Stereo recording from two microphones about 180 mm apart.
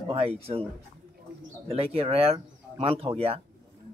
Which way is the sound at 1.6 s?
35° right (ahead or behind).